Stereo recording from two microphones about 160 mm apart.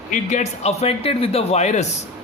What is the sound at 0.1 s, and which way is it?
A man's voice, 50° left (ahead or behind).